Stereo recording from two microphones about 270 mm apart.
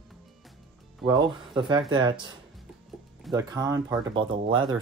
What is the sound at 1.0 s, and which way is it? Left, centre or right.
Speech, centre.